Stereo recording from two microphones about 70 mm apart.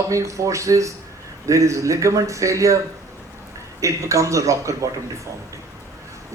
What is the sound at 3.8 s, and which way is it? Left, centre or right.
Speech, right.